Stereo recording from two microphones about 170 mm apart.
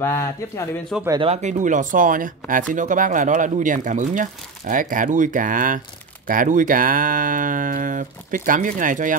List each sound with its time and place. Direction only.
0.0 s speech: 15° left (ahead or behind)
0.9 s speech: centre (ahead or behind)
1.2 s speech: 40° right (ahead or behind)